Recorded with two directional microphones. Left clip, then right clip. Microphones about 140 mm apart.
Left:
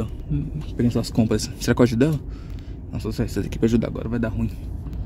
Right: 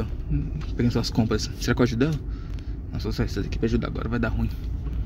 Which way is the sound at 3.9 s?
20° left (ahead or behind).